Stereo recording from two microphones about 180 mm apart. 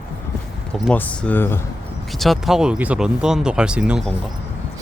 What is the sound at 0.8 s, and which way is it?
Speech, 5° left (ahead or behind).